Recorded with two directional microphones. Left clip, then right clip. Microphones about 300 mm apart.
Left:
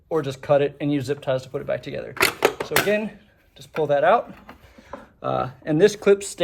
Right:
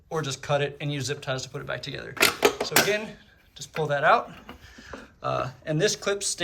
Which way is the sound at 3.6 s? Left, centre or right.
Centre.